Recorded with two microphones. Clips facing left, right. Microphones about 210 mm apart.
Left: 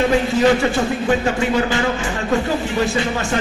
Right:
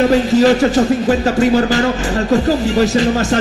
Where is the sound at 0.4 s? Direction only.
40° right (ahead or behind).